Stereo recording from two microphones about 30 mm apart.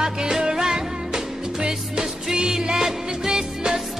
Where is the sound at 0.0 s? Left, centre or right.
Right.